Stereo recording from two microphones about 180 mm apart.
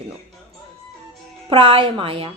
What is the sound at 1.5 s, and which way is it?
Speech, 30° right (ahead or behind).